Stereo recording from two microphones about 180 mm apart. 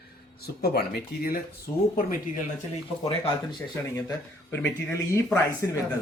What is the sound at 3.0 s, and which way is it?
Speech, 30° left (ahead or behind).